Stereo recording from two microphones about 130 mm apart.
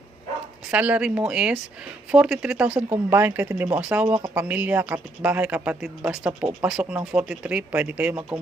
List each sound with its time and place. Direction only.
0.7 s speech: 10° right (ahead or behind)